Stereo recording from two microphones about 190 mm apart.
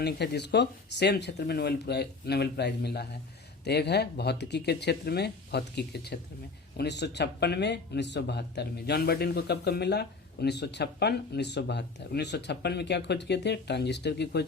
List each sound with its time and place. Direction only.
0.0 s speech: 60° left (ahead or behind)